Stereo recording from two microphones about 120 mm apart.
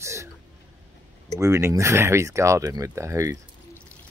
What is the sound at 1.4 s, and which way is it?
Speech, 25° right (ahead or behind).